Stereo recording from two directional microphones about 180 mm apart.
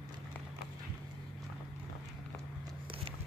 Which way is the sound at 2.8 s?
30° right (ahead or behind).